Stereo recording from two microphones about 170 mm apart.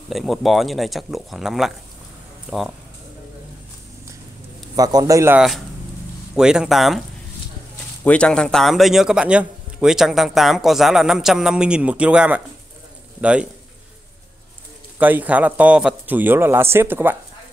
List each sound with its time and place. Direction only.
0.1 s a man's voice: centre (ahead or behind)
4.7 s a man's voice: 20° right (ahead or behind)
6.3 s a man's voice: 5° right (ahead or behind)
8.0 s a man's voice: 5° left (ahead or behind)
15.0 s a man's voice: 10° right (ahead or behind)